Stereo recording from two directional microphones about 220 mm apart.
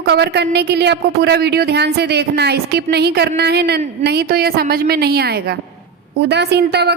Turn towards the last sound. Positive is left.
turn(degrees=-50)  # may be behind; listen again after turning